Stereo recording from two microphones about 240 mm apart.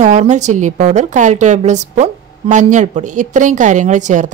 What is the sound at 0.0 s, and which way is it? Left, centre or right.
A woman's voice, right.